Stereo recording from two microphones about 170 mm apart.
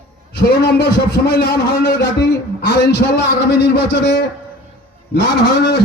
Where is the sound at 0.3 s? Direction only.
70° left (ahead or behind).